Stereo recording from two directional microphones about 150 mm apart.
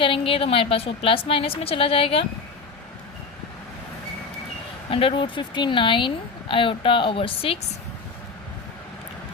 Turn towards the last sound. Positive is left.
turn(degrees=40)  # may be behind; listen again after turning